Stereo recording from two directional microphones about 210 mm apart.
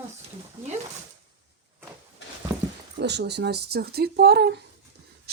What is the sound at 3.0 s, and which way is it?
Speech, 55° right (ahead or behind).